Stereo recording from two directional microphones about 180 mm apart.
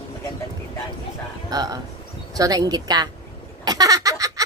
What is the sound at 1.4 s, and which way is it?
Speech, 20° right (ahead or behind).